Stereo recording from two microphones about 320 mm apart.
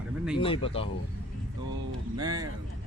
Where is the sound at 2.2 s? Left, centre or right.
Centre.